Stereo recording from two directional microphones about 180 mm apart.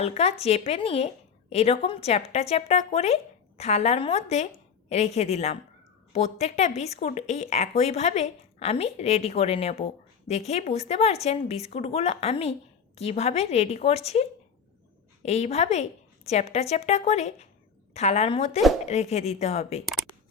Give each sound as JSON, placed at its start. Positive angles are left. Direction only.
{"t": 0.0, "sound": "speech", "side_deg": 35}